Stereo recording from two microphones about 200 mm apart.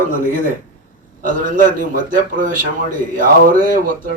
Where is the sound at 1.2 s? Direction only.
40° right (ahead or behind).